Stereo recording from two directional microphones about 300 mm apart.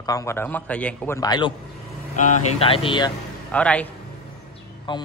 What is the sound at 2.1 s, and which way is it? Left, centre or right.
Speech, left.